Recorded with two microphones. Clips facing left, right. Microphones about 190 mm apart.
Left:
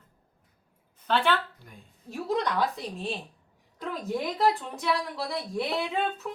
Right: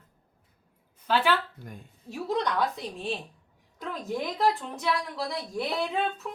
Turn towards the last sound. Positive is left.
turn(degrees=0)  # may be behind; listen again after turning